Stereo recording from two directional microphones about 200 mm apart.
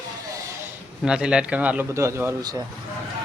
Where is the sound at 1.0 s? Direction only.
5° right (ahead or behind).